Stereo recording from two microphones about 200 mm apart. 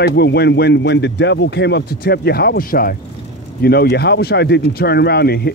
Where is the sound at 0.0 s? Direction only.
55° left (ahead or behind).